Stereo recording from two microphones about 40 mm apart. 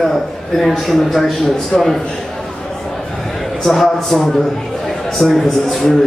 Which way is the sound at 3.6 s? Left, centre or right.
Centre.